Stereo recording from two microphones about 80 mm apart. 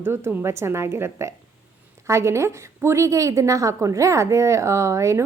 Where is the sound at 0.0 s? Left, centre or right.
Right.